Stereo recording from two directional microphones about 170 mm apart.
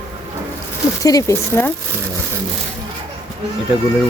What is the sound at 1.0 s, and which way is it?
Speech, 20° left (ahead or behind).